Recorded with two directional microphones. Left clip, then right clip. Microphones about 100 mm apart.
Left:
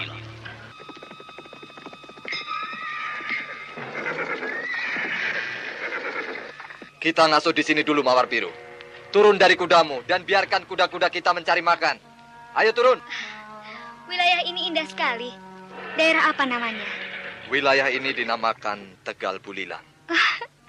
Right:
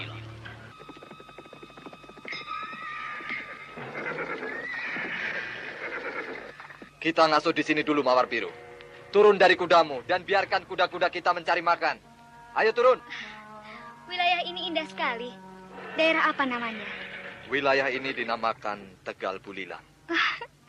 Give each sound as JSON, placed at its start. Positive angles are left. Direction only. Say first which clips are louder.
{"t": 0.0, "sound": "music", "louder": "left 6 dB", "side_deg": -30}
{"t": 2.2, "sound": "neigh", "louder": "left 6 dB", "side_deg": -35}
{"t": 9.1, "sound": "a man's voice", "louder": "left 3 dB", "side_deg": -35}